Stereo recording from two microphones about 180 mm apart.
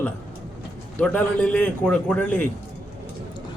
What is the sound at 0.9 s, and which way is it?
A man's voice, 5° left (ahead or behind).